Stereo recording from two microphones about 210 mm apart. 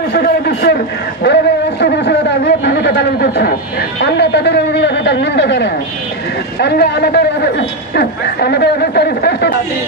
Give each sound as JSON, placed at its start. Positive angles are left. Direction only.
{"t": 0.1, "sound": "a man's voice", "side_deg": 50}
{"t": 1.2, "sound": "a sound", "side_deg": 55}
{"t": 4.0, "sound": "a man's voice", "side_deg": 55}